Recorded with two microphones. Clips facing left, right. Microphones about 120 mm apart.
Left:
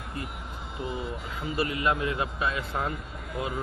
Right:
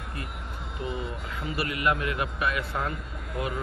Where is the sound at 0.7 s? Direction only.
Centre (ahead or behind).